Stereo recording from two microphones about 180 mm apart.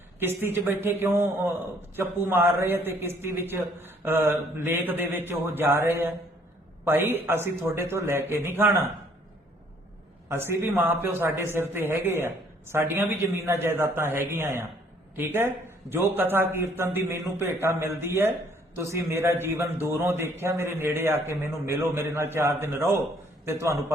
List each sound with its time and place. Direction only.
0.2 s a man's voice: 10° right (ahead or behind)
10.2 s a man's voice: 15° right (ahead or behind)